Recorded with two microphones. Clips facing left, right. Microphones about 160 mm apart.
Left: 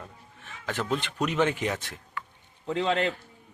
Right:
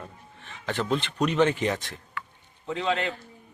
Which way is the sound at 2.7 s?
35° left (ahead or behind).